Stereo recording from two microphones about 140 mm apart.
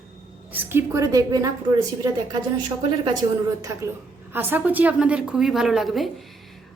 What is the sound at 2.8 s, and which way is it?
Speech, 30° right (ahead or behind).